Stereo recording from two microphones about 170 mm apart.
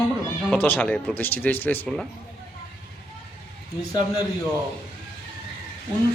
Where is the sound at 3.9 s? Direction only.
20° left (ahead or behind).